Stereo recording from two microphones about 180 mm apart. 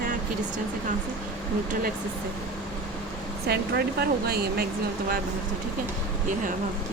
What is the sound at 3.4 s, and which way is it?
Speech, 65° right (ahead or behind).